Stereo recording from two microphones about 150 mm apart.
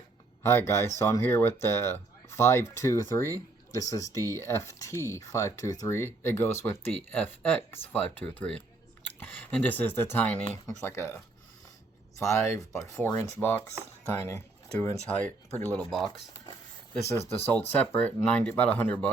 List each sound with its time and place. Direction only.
0.4 s speech: 20° left (ahead or behind)
12.2 s speech: 20° left (ahead or behind); by 16.1 s centre (ahead or behind)
17.2 s speech: 15° left (ahead or behind)